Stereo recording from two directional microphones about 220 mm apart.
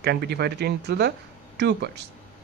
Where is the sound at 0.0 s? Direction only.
45° right (ahead or behind).